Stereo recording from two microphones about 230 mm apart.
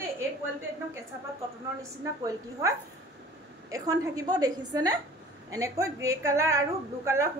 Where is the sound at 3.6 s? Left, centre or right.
Centre.